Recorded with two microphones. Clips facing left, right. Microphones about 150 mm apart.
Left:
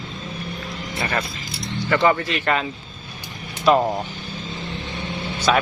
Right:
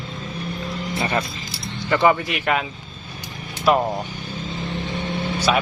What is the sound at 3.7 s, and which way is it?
Speech, 5° right (ahead or behind).